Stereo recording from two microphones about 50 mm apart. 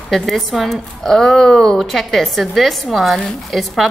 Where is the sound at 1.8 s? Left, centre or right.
Centre.